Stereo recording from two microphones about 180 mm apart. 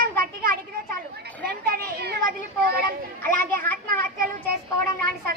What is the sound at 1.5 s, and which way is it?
Speech, 60° right (ahead or behind).